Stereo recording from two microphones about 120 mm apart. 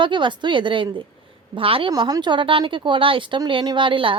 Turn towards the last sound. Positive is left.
turn(degrees=-45)  # may be behind; listen again after turning